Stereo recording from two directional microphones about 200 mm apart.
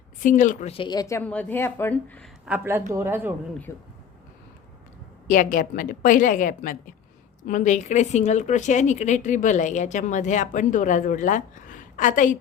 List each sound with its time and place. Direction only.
0.2 s a woman's voice: 40° left (ahead or behind); by 2.3 s 5° left (ahead or behind)
2.5 s speech: 10° right (ahead or behind)
3.7 s a woman's voice: 10° left (ahead or behind)
5.3 s a woman's voice: 40° left (ahead or behind)